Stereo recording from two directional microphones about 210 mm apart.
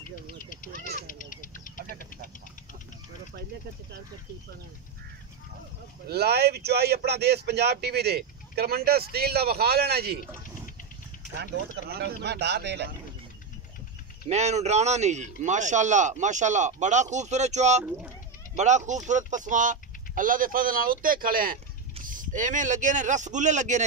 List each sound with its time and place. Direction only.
0.5 s a sound: 40° left (ahead or behind)
6.0 s speech: 50° right (ahead or behind)
11.3 s speech: 55° right (ahead or behind)
14.2 s a man's voice: 30° right (ahead or behind)